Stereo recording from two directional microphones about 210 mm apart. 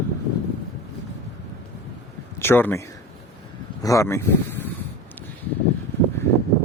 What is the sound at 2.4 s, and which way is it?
Speech, 10° left (ahead or behind).